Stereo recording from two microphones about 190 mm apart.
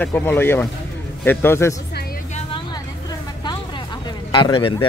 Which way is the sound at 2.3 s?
30° left (ahead or behind).